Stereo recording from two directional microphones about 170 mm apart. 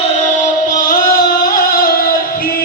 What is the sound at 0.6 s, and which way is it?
Music, 55° left (ahead or behind).